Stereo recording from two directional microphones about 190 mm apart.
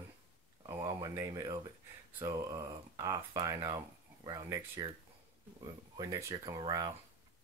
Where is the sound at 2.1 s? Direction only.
20° right (ahead or behind).